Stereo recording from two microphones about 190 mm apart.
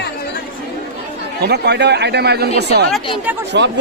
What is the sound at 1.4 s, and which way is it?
A man's voice, 60° right (ahead or behind).